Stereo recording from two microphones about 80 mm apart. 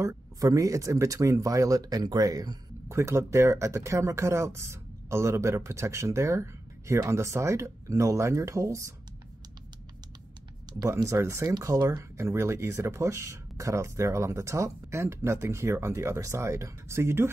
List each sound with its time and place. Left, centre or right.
0.0 s speech: right
2.9 s speech: right
10.9 s speech: right